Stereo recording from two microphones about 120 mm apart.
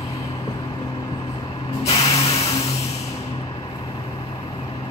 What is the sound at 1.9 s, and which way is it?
Spray, 60° left (ahead or behind).